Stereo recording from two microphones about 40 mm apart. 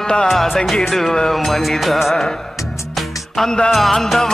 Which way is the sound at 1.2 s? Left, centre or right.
Centre.